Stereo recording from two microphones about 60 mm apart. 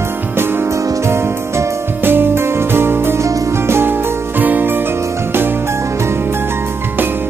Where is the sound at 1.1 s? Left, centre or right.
Right.